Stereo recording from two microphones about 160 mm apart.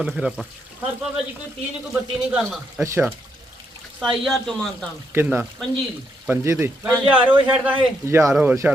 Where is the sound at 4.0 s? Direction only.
Centre (ahead or behind).